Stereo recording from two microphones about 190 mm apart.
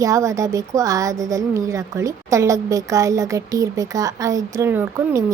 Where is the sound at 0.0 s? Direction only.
15° right (ahead or behind).